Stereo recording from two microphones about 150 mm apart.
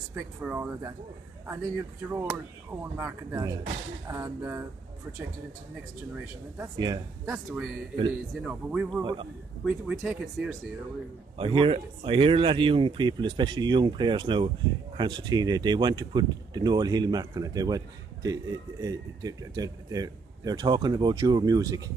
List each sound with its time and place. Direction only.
0.4 s speech: 10° right (ahead or behind)
7.2 s speech: centre (ahead or behind)
9.0 s a man's voice: 35° right (ahead or behind)
9.7 s speech: 5° right (ahead or behind)
11.3 s a man's voice: 35° right (ahead or behind)